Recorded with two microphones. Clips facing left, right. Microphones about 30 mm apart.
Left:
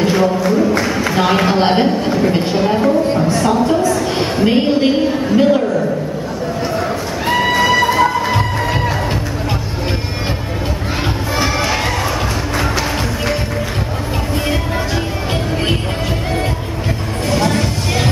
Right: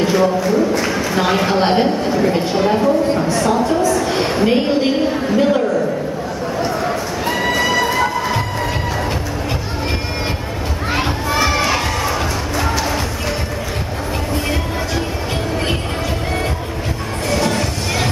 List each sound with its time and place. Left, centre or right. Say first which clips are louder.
0.0 s a sound: left 1 dB; centre
1.1 s a woman's voice: left 2 dB; centre
2.5 s a woman's voice: left 1 dB; centre
4.5 s a woman's voice: left 4 dB; centre
7.2 s music: left 4 dB; centre
11.3 s music: right 1 dB; centre
17.3 s music: left 2 dB; centre